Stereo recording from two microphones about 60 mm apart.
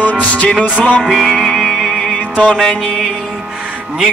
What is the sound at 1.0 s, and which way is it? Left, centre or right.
Music, centre.